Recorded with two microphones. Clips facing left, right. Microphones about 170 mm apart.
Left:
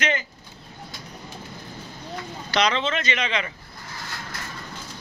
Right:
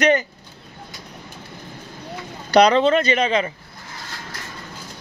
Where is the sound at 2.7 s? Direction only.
40° right (ahead or behind).